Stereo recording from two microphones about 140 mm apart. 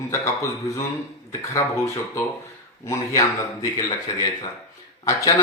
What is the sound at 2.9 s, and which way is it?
Speech, 25° left (ahead or behind).